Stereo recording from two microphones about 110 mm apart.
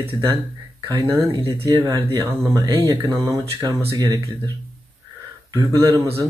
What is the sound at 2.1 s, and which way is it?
Speech, 30° right (ahead or behind).